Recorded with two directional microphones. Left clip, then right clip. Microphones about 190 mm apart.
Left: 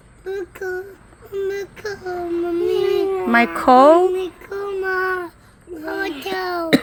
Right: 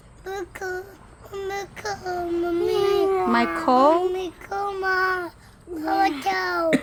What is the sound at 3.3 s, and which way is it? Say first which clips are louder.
Speech: left 10 dB; 20° left (ahead or behind).